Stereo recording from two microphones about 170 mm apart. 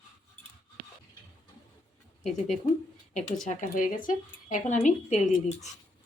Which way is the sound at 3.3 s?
50° left (ahead or behind).